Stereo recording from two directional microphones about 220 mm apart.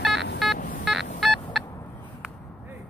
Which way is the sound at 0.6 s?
35° left (ahead or behind).